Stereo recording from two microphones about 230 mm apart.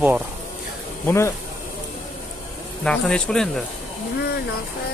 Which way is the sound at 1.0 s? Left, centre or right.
Centre.